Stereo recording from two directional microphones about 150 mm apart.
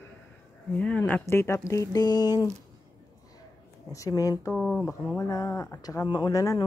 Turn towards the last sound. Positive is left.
turn(degrees=25)  # may be behind; listen again after turning